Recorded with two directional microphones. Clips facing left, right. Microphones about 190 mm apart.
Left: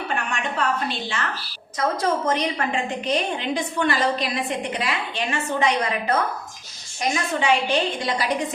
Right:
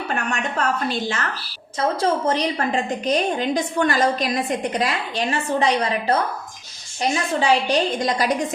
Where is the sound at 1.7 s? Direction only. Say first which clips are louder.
Right 2 dB; 30° right (ahead or behind).